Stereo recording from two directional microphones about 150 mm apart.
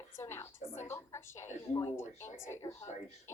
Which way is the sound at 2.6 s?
25° left (ahead or behind).